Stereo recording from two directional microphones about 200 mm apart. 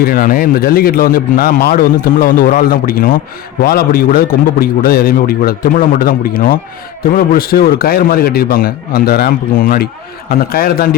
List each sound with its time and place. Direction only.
0.0 s a man's voice: 45° left (ahead or behind)